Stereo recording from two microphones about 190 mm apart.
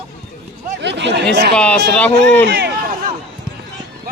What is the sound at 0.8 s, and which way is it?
Chatter, 65° right (ahead or behind).